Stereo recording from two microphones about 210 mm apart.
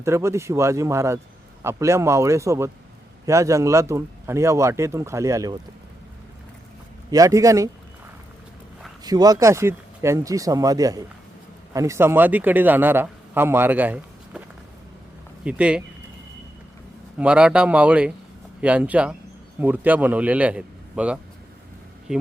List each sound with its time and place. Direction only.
0.0 s speech: 15° right (ahead or behind)
7.1 s speech: 15° right (ahead or behind)
9.0 s a man's voice: 20° right (ahead or behind)
15.4 s speech: 5° right (ahead or behind)
17.2 s speech: 5° right (ahead or behind)